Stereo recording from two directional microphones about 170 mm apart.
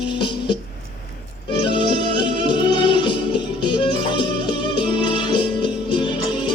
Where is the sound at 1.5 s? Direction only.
30° left (ahead or behind).